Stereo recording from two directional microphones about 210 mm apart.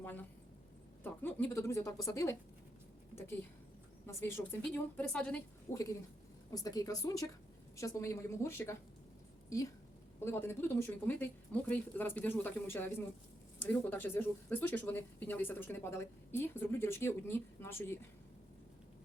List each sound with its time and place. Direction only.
0.0 s speech: 10° left (ahead or behind)
4.0 s speech: 10° left (ahead or behind)
10.2 s speech: 10° left (ahead or behind)